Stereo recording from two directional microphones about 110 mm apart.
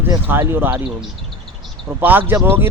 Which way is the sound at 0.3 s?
20° right (ahead or behind).